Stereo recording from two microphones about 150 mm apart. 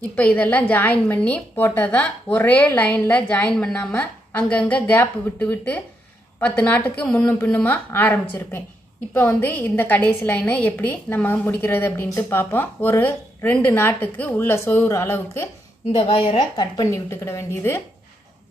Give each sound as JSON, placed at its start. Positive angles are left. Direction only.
{"t": 0.1, "sound": "a woman's voice", "side_deg": 10}
{"t": 16.1, "sound": "a woman's voice", "side_deg": 40}
{"t": 16.5, "sound": "speech", "side_deg": 20}